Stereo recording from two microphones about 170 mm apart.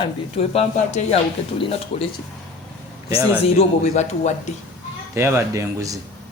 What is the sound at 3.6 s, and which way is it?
Speech, 45° left (ahead or behind).